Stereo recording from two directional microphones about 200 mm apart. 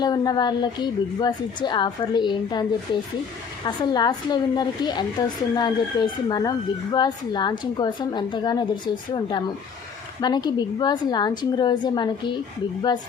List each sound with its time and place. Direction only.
0.0 s a woman's voice: 20° left (ahead or behind)
3.7 s a woman's voice: 20° left (ahead or behind)